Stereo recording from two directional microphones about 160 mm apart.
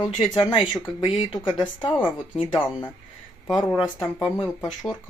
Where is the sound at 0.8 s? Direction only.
Centre (ahead or behind).